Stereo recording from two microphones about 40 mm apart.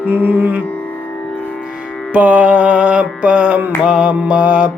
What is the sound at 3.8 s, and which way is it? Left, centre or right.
Music, right.